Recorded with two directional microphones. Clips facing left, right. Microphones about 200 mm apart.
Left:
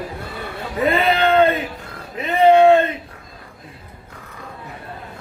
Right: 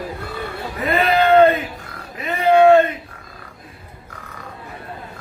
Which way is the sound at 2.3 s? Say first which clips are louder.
Left 1 dB; 25° left (ahead or behind).